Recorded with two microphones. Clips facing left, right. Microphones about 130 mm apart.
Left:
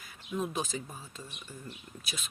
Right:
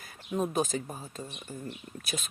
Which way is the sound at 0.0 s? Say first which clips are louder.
Right 4 dB; 45° right (ahead or behind).